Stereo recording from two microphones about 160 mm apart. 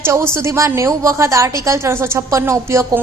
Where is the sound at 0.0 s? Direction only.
15° right (ahead or behind).